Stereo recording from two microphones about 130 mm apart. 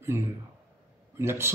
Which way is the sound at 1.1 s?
20° right (ahead or behind).